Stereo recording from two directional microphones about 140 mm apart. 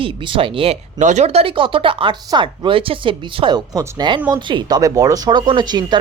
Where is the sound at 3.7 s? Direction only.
25° right (ahead or behind).